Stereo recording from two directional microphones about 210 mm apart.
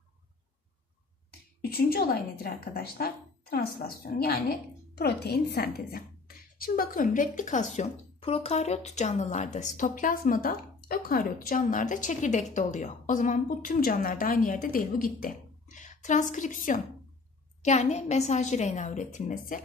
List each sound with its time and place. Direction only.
1.6 s speech: 45° left (ahead or behind)